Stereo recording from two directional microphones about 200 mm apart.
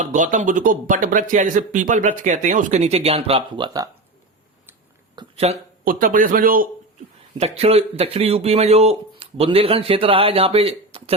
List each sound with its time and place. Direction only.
0.0 s speech: 40° right (ahead or behind); by 3.8 s 20° right (ahead or behind)
5.1 s a sound: 30° right (ahead or behind)
5.8 s speech: 45° right (ahead or behind)
7.3 s speech: 30° right (ahead or behind)